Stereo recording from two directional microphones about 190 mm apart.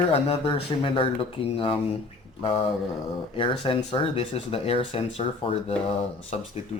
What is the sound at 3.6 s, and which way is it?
Speech, 25° left (ahead or behind).